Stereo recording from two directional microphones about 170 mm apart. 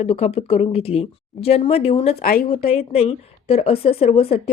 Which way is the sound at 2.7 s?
40° left (ahead or behind).